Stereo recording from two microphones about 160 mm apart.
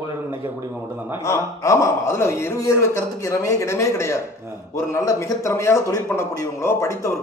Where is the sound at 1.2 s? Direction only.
20° left (ahead or behind).